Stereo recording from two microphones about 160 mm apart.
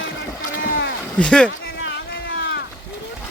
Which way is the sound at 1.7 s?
80° left.